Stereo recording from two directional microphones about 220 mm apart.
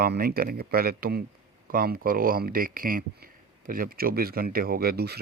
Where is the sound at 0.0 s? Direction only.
45° right (ahead or behind).